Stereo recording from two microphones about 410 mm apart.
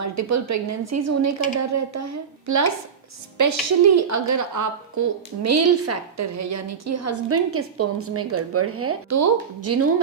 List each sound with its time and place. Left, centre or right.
0.0 s a woman's voice: right